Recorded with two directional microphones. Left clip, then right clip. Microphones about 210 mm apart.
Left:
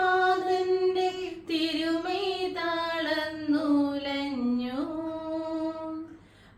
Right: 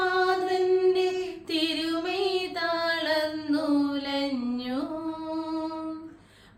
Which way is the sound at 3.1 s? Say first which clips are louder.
Right 2 dB; 45° right (ahead or behind).